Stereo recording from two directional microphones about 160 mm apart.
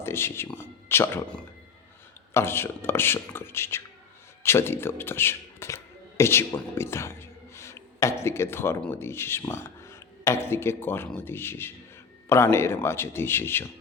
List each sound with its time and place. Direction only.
0.0 s speech: 15° left (ahead or behind)
2.3 s speech: 15° left (ahead or behind)
6.7 s a sound: 15° left (ahead or behind)
8.2 s speech: 15° left (ahead or behind)